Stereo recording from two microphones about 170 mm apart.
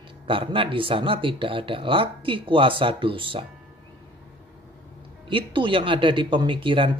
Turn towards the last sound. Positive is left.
turn(degrees=-30)  # may be behind; listen again after turning